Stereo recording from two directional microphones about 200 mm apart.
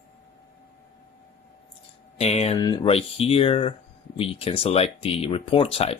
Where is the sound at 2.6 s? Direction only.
20° left (ahead or behind).